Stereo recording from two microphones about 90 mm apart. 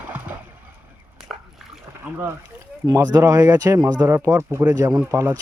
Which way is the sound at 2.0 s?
20° right (ahead or behind).